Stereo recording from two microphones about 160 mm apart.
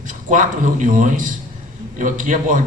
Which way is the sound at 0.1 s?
55° right (ahead or behind).